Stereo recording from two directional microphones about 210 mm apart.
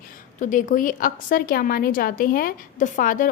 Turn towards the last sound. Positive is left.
turn(degrees=40)  # may be behind; listen again after turning